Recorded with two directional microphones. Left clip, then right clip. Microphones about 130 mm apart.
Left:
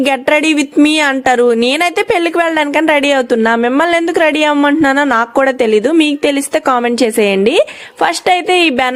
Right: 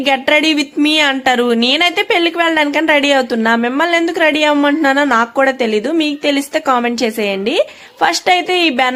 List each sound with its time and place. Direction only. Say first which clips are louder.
0.0 s speech: left 1 dB; 40° left (ahead or behind)